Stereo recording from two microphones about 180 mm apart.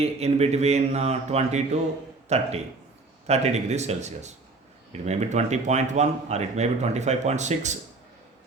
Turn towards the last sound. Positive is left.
turn(degrees=-40)  # may be behind; listen again after turning